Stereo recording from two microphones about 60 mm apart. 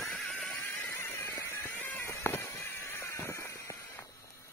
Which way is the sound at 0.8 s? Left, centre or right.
Left.